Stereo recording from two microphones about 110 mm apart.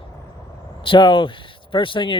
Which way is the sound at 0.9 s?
50° left (ahead or behind).